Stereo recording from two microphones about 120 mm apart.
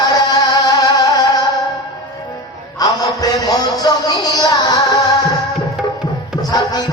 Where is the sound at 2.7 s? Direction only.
30° left (ahead or behind).